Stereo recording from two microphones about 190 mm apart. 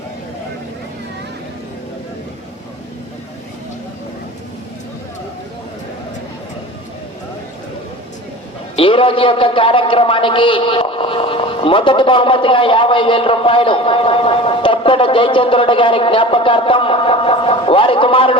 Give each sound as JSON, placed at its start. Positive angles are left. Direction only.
{"t": 8.7, "sound": "a man's voice", "side_deg": 30}